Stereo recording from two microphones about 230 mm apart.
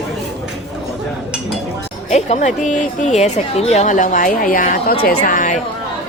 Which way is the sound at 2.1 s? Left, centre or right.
Left.